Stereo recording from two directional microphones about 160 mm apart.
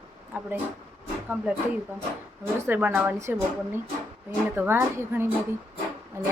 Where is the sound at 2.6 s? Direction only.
10° right (ahead or behind).